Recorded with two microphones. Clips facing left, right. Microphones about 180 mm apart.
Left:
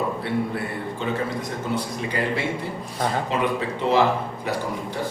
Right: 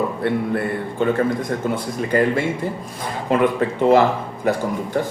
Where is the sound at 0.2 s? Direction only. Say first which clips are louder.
Right 5 dB; 50° right (ahead or behind).